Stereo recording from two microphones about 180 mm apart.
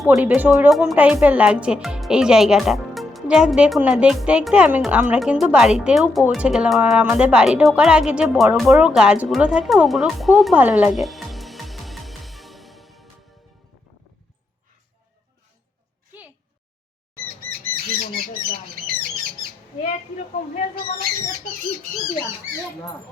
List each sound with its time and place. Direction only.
0.0 s speech: centre (ahead or behind)
9.3 s music: 5° right (ahead or behind)
17.2 s bird: 50° right (ahead or behind)
18.7 s squawk: 50° right (ahead or behind)